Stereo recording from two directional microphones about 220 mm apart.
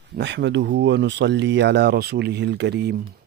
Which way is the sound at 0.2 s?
55° right (ahead or behind).